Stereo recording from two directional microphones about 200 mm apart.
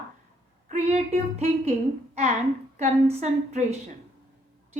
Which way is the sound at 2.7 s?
35° right (ahead or behind).